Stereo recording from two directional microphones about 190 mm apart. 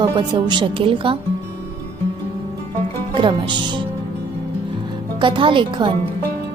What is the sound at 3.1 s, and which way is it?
Speech, 25° right (ahead or behind).